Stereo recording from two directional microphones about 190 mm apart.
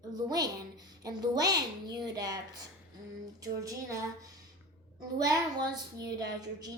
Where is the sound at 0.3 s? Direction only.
20° right (ahead or behind).